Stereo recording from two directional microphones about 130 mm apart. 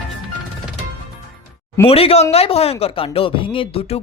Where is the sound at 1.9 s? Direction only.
50° left (ahead or behind).